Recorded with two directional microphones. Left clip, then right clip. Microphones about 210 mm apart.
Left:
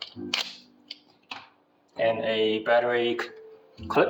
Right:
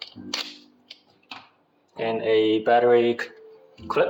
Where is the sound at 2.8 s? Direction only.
40° right (ahead or behind).